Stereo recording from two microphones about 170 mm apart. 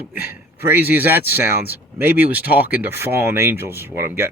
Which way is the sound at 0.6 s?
10° right (ahead or behind).